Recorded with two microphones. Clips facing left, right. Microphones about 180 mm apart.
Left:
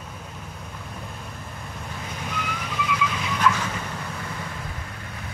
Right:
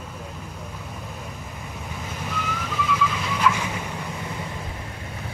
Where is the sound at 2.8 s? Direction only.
10° left (ahead or behind).